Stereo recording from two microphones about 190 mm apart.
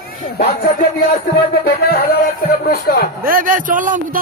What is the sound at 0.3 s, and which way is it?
Speech, 55° left (ahead or behind).